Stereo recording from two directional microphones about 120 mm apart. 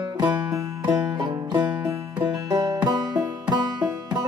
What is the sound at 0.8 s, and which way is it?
Music, 35° right (ahead or behind).